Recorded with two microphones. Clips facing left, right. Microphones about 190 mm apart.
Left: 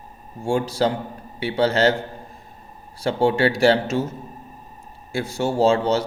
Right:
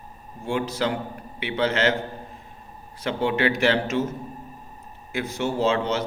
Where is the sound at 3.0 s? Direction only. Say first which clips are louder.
Left 4 dB; 30° left (ahead or behind).